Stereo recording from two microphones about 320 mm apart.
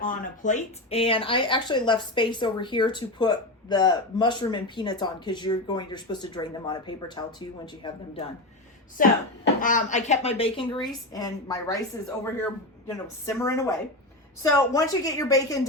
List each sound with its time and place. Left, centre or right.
0.0 s speech: left
9.0 s speech: left
12.9 s speech: centre